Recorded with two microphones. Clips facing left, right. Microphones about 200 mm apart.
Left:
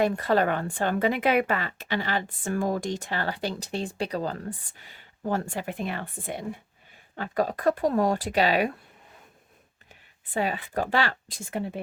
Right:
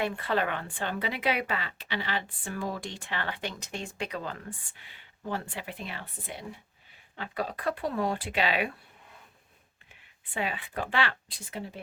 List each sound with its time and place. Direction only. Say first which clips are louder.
0.0 s a woman's voice: left 6 dB; 40° left (ahead or behind)
9.9 s speech: left 7 dB; 40° left (ahead or behind)